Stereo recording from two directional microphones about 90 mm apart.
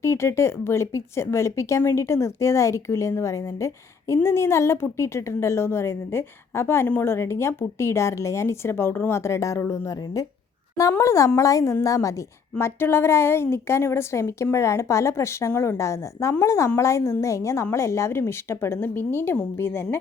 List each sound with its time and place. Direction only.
0.0 s a woman's voice: 30° left (ahead or behind)